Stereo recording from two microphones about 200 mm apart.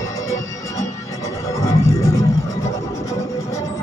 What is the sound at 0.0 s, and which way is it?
Music, 15° left (ahead or behind).